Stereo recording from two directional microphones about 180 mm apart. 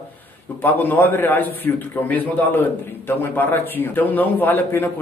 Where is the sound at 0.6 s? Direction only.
10° left (ahead or behind).